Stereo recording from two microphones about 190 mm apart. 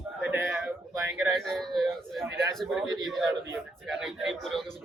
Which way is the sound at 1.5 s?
Centre (ahead or behind).